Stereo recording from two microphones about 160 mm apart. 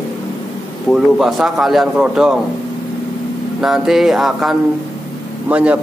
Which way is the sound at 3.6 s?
Centre (ahead or behind).